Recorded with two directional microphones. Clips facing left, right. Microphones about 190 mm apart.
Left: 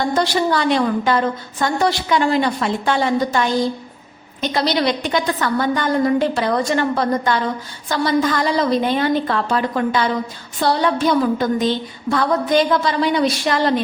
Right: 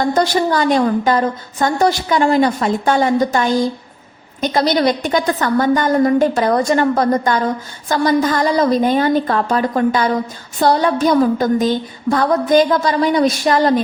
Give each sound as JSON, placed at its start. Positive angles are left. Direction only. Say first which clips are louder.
{"t": 0.1, "sound": "a woman's voice", "louder": "right 2 dB", "side_deg": -45}